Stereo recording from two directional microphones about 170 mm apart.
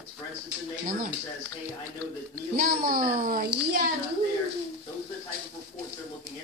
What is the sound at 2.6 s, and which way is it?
A child's voice, 55° right (ahead or behind).